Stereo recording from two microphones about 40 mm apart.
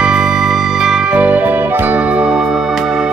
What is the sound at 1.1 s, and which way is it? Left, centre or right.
Music, right.